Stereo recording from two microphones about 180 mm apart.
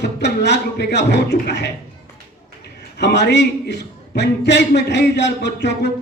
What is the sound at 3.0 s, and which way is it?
A man's voice, 70° left (ahead or behind).